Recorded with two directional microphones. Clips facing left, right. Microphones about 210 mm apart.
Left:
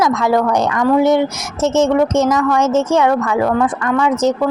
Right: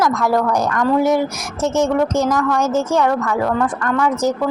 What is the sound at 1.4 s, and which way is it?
A woman's voice, 25° left (ahead or behind).